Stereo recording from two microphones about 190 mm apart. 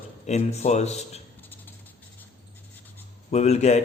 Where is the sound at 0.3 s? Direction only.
35° left (ahead or behind).